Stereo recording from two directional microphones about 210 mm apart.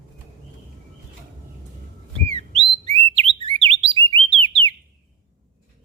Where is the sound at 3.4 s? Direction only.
25° right (ahead or behind).